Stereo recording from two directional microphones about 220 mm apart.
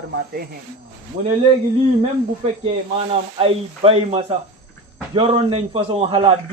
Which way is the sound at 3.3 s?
25° right (ahead or behind).